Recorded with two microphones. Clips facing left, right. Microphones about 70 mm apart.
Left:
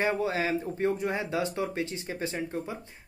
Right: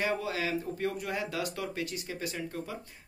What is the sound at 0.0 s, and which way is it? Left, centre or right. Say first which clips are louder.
Speech: left 4 dB; left.